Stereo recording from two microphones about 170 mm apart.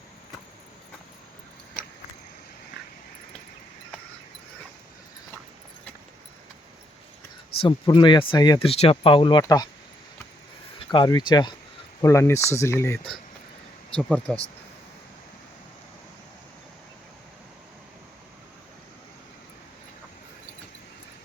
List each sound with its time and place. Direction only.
7.6 s speech: 30° left (ahead or behind)
10.8 s speech: 25° left (ahead or behind); by 14.4 s 5° left (ahead or behind)